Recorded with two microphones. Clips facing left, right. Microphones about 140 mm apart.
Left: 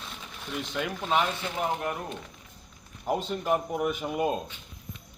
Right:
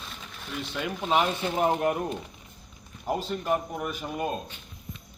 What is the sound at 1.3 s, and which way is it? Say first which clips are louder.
Speech: right 5 dB; 25° right (ahead or behind).